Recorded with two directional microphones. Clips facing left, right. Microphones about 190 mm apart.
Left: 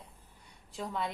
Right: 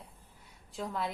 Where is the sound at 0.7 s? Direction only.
Centre (ahead or behind).